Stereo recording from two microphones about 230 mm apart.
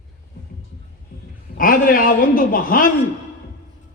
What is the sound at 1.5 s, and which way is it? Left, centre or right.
A woman's voice, left.